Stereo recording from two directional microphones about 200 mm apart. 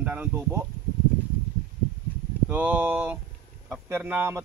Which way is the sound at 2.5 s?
10° right (ahead or behind).